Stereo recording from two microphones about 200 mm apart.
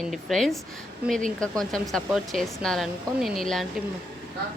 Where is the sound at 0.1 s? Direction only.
Centre (ahead or behind).